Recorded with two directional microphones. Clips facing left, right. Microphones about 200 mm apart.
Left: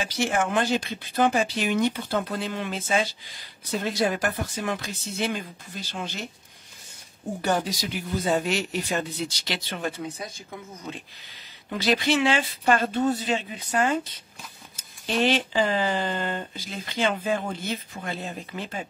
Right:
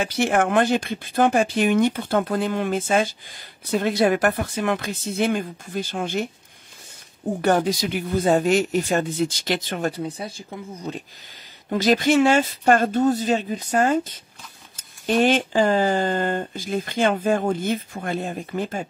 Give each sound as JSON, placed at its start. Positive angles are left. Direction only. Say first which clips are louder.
{"t": 0.0, "sound": "speech", "louder": "right 5 dB", "side_deg": -60}
{"t": 7.4, "sound": "speech", "louder": "right 6 dB", "side_deg": -60}
{"t": 11.7, "sound": "speech", "louder": "right 6 dB", "side_deg": -45}